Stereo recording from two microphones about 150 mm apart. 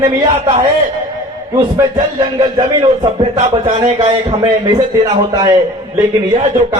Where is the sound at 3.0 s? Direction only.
45° right (ahead or behind).